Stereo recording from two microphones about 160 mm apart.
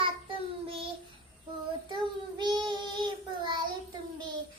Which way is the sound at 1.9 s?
30° right (ahead or behind).